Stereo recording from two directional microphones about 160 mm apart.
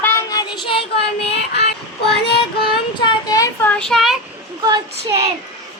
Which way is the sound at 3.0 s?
20° left (ahead or behind).